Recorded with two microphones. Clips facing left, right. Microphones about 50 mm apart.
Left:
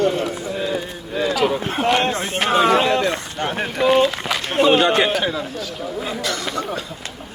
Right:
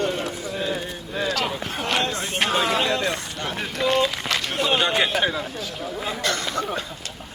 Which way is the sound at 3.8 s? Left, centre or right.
Centre.